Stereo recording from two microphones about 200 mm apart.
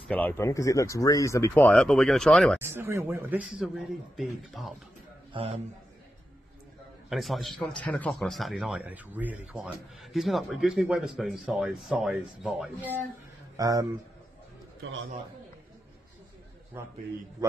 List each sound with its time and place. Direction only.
0.1 s speech: 10° left (ahead or behind)
2.6 s a man's voice: 10° right (ahead or behind)
5.3 s a man's voice: 30° right (ahead or behind)
7.1 s speech: centre (ahead or behind)
13.6 s speech: 15° right (ahead or behind)
16.8 s a man's voice: 10° right (ahead or behind)